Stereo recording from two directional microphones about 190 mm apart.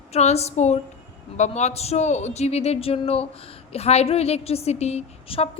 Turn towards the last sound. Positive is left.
turn(degrees=35)  # may be behind; listen again after turning